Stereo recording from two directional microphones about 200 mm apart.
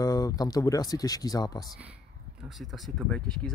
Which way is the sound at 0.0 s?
20° left (ahead or behind).